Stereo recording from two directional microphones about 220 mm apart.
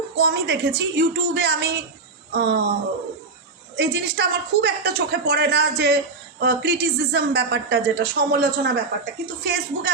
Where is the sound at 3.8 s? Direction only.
45° right (ahead or behind).